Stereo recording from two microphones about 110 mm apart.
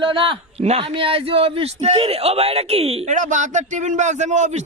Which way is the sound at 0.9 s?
55° right (ahead or behind).